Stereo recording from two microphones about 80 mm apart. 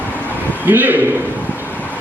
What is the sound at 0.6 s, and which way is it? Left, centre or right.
Speech, right.